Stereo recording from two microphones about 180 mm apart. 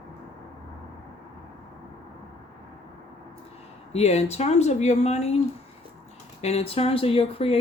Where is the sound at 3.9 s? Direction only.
35° left (ahead or behind).